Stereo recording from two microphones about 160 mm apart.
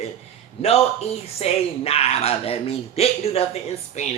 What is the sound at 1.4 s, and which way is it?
A man's voice, 40° left (ahead or behind).